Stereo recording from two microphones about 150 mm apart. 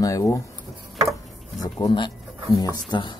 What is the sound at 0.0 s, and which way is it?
Speech, 20° left (ahead or behind).